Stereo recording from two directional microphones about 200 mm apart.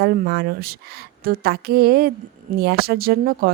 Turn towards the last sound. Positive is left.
turn(degrees=-50)  # may be behind; listen again after turning